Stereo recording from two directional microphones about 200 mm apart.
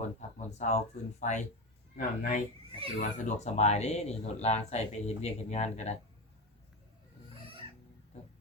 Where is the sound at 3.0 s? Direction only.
35° left (ahead or behind).